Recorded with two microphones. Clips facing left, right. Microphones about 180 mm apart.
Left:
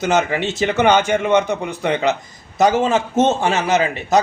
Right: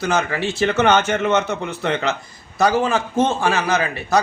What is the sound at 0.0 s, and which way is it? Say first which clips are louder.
A man's voice: left 3 dB; 20° left (ahead or behind).